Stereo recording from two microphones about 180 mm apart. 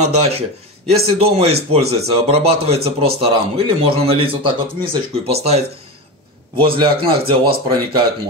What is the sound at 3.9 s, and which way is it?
Speech, 30° right (ahead or behind).